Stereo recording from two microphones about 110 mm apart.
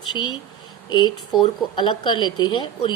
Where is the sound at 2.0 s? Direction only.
45° left (ahead or behind).